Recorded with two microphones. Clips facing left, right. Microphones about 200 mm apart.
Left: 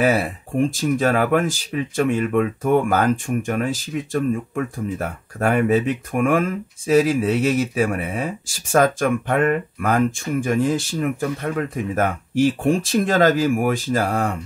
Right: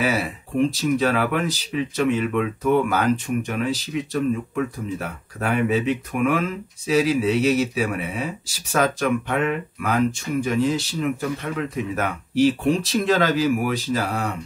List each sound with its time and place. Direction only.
0.0 s speech: 50° left (ahead or behind)